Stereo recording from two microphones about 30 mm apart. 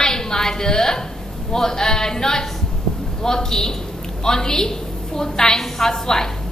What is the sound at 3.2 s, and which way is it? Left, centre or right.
A man's voice, centre.